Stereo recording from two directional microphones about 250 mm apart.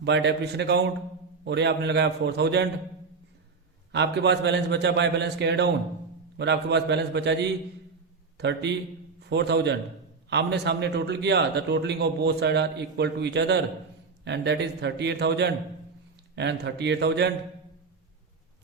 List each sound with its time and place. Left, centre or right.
0.0 s a man's voice: right
3.9 s a man's voice: right